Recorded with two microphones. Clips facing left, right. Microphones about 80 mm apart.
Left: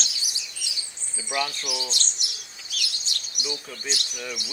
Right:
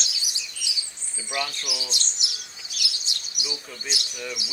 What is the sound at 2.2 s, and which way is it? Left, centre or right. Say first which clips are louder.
Bird: right 2 dB; centre.